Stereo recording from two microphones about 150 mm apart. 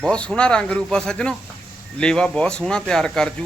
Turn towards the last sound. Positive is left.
turn(degrees=5)  # may be behind; listen again after turning